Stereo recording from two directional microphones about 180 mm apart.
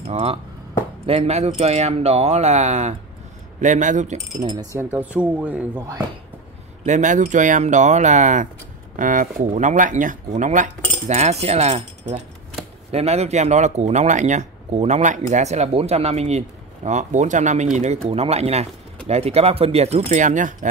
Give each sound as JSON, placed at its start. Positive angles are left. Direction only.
{"t": 0.1, "sound": "speech", "side_deg": -35}
{"t": 4.6, "sound": "speech", "side_deg": -15}
{"t": 6.9, "sound": "speech", "side_deg": -45}